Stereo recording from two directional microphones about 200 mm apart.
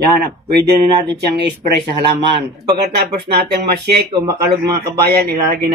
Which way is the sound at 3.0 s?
55° right (ahead or behind).